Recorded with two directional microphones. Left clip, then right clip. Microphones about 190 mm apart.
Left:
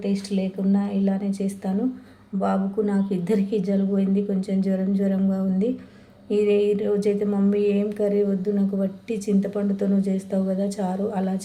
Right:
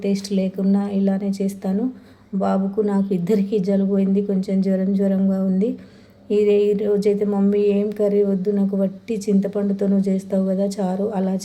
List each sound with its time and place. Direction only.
0.0 s a woman's voice: 25° right (ahead or behind)